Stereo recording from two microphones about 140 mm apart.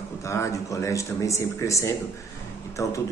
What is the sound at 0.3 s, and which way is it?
A man's voice, 20° left (ahead or behind).